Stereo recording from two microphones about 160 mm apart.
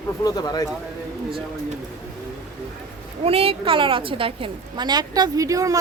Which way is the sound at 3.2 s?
35° right (ahead or behind).